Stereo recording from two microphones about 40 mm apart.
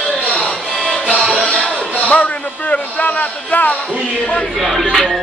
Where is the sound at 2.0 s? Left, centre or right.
Left.